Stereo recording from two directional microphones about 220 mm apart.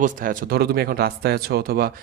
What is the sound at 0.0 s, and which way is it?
A man's voice, 40° right (ahead or behind).